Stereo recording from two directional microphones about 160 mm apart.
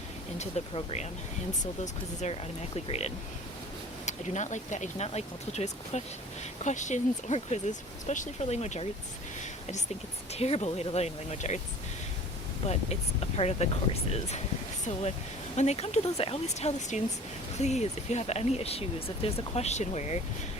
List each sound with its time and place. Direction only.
0.3 s speech: 40° left (ahead or behind)
10.3 s speech: 40° left (ahead or behind)
12.6 s speech: 40° left (ahead or behind)
15.5 s speech: 45° left (ahead or behind)